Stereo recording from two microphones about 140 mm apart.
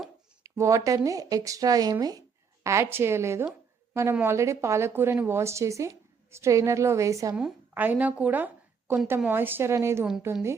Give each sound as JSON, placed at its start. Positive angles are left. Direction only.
{"t": 0.4, "sound": "speech", "side_deg": -20}
{"t": 7.7, "sound": "a woman's voice", "side_deg": -10}